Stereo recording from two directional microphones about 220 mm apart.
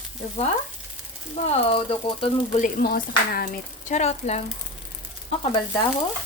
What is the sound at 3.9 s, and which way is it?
Frying, 30° left (ahead or behind).